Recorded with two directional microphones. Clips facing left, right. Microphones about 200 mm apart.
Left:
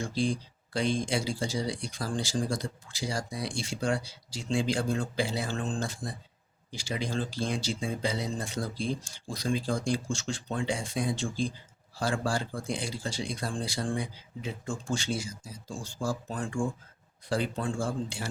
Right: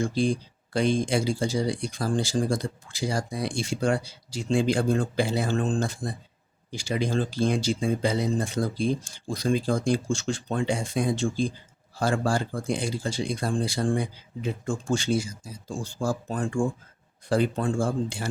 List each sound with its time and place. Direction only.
0.0 s speech: 55° right (ahead or behind)